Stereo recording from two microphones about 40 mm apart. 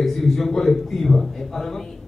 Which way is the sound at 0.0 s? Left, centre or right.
Centre.